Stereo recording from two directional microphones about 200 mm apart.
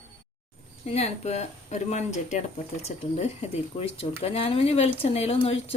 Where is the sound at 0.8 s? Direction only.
30° left (ahead or behind).